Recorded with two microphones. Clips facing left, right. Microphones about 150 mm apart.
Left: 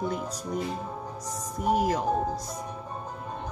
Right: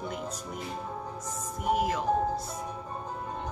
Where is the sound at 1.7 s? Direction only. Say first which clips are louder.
Left 3 dB; 40° left (ahead or behind).